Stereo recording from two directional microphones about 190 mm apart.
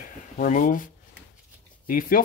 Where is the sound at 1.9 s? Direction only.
50° left (ahead or behind).